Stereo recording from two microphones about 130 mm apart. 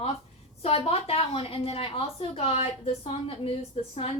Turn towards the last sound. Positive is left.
turn(degrees=45)  # may be behind; listen again after turning